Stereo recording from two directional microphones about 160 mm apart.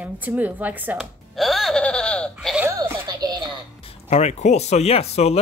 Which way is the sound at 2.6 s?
15° right (ahead or behind).